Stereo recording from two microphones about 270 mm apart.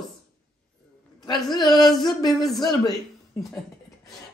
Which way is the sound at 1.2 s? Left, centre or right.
Centre.